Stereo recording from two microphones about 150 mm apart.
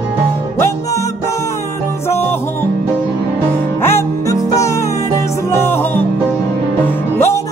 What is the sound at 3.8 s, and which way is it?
Music, 20° left (ahead or behind).